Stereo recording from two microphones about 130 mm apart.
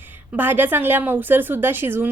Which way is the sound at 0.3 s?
15° right (ahead or behind).